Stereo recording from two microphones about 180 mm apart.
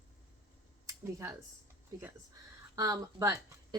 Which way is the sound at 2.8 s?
15° right (ahead or behind).